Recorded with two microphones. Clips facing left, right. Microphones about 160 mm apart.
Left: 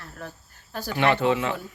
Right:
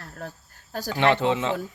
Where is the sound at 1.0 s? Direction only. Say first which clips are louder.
Even; 20° right (ahead or behind).